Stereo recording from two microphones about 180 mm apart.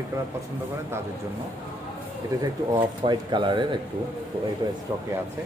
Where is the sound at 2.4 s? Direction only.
25° right (ahead or behind).